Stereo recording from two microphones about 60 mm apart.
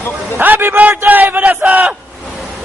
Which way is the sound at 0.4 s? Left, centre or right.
Right.